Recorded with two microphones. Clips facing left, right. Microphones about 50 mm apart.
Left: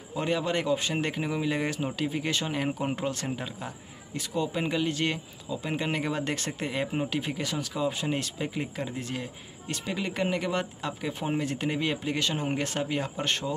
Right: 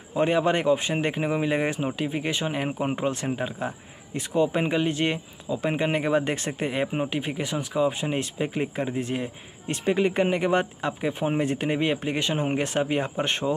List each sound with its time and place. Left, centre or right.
0.1 s speech: right